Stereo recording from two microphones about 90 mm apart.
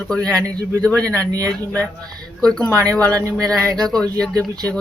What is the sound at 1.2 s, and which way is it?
Speech, 40° right (ahead or behind).